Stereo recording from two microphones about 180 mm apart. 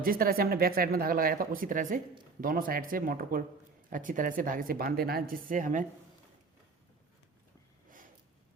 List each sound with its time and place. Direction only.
0.0 s speech: 55° right (ahead or behind)